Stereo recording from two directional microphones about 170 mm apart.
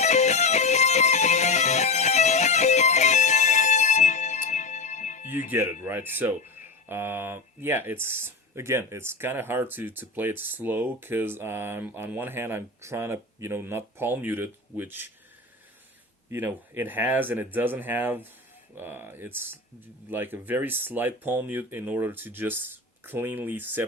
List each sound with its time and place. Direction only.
0.0 s music: 40° left (ahead or behind)
5.8 s speech: 10° right (ahead or behind)
16.3 s speech: 10° right (ahead or behind)